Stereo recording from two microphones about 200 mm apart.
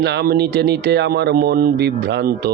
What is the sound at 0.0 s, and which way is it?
Speech, 55° right (ahead or behind).